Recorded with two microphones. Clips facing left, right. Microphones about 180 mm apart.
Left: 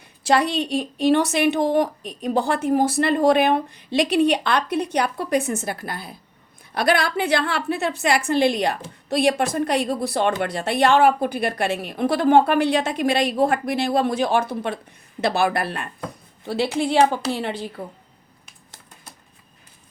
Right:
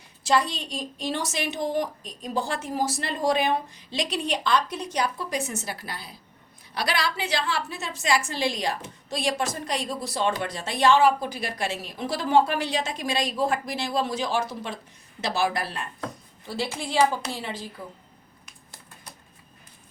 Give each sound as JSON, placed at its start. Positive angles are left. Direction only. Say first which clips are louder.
{"t": 0.3, "sound": "a woman's voice", "louder": "left 5 dB", "side_deg": 65}